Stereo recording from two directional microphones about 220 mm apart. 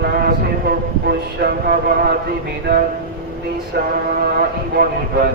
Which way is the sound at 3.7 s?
45° right (ahead or behind).